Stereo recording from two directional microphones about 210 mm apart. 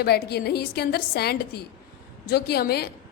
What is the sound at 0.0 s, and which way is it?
A woman's voice, 50° left (ahead or behind).